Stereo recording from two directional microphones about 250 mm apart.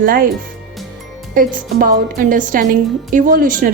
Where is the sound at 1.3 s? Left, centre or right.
Right.